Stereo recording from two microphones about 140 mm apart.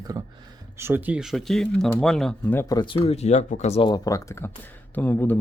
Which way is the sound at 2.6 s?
30° left (ahead or behind).